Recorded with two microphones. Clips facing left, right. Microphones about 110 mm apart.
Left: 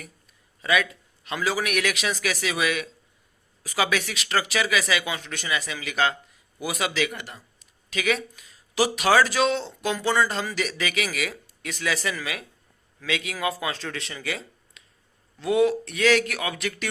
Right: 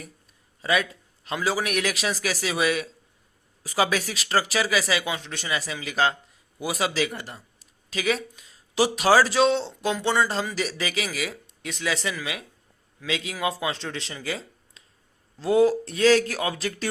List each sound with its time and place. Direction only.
0.6 s speech: 30° right (ahead or behind)